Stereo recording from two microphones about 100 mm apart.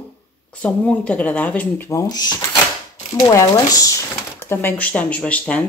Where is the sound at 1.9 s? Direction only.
40° left (ahead or behind).